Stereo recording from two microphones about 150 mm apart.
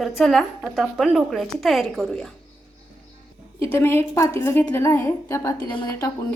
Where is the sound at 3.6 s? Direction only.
15° left (ahead or behind).